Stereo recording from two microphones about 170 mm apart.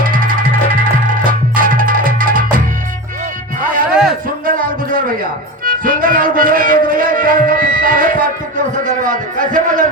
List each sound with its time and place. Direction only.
0.0 s music: 55° right (ahead or behind)
3.8 s a sound: 5° right (ahead or behind)
4.4 s music: 55° right (ahead or behind)